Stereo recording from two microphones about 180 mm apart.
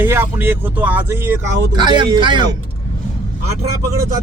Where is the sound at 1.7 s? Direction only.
25° right (ahead or behind).